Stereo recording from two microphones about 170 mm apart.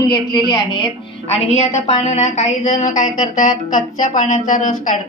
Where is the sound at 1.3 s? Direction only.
40° left (ahead or behind).